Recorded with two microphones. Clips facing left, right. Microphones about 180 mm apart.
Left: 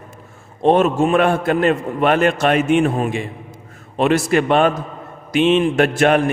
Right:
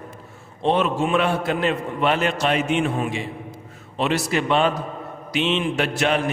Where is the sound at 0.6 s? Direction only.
45° left (ahead or behind).